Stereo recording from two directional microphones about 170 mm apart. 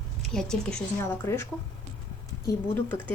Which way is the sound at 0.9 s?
15° left (ahead or behind).